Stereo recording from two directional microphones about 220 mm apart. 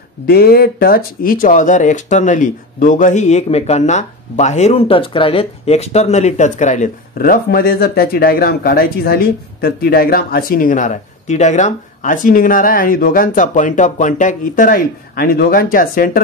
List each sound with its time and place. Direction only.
0.3 s speech: 45° left (ahead or behind)